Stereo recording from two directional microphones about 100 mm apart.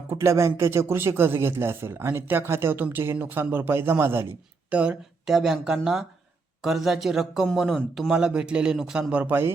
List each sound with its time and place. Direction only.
0.1 s speech: 30° right (ahead or behind)
4.7 s speech: 10° right (ahead or behind)
8.1 s a man's voice: 10° right (ahead or behind)